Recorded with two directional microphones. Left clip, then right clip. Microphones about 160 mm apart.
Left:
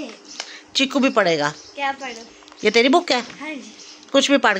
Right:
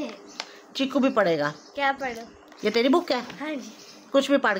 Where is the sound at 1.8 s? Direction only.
10° right (ahead or behind).